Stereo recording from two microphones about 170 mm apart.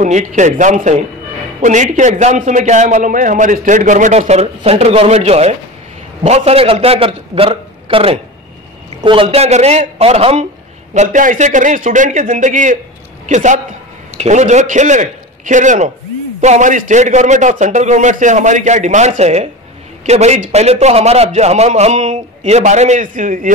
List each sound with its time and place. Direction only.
0.0 s a man's voice: 50° right (ahead or behind)